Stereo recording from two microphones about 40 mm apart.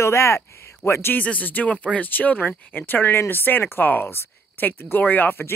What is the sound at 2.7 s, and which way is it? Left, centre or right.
Speech, left.